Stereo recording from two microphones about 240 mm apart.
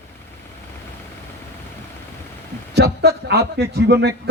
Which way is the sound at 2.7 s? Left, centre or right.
Right.